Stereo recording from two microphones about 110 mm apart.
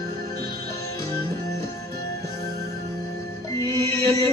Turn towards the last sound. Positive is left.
turn(degrees=30)  # may be behind; listen again after turning